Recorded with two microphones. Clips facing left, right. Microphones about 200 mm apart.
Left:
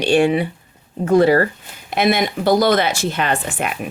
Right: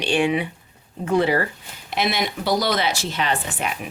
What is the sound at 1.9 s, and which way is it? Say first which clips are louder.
Speech: left 6 dB; 50° left (ahead or behind).